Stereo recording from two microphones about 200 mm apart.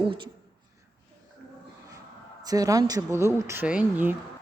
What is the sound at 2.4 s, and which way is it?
Speech, 20° right (ahead or behind).